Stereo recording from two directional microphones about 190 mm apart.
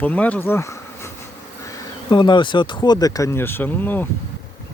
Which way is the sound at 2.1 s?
25° left (ahead or behind).